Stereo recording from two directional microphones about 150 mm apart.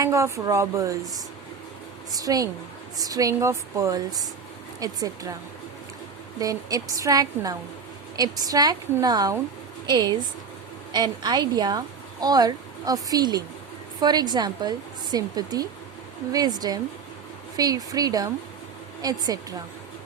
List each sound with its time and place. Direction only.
0.0 s speech: 20° right (ahead or behind)
6.4 s a woman's voice: 25° right (ahead or behind)